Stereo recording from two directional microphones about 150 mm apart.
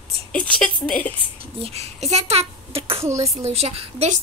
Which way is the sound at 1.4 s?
40° right (ahead or behind).